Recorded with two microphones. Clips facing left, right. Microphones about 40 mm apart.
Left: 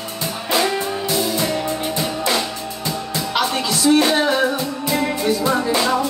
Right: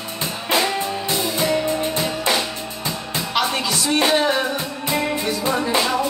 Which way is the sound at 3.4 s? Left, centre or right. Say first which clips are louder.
Left 5 dB; centre.